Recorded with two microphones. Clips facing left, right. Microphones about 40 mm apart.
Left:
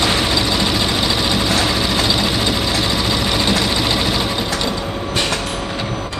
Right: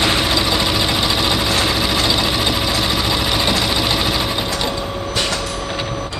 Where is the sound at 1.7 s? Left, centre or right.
Centre.